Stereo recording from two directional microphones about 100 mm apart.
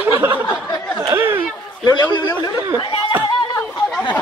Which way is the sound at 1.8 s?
45° left (ahead or behind).